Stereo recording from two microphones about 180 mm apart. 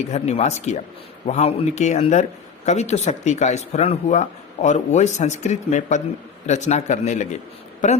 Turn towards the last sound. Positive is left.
turn(degrees=45)  # may be behind; listen again after turning